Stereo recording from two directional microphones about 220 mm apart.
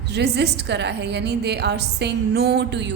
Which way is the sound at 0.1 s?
50° right (ahead or behind).